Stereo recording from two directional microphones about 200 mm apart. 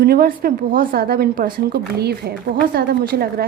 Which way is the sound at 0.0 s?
50° right (ahead or behind).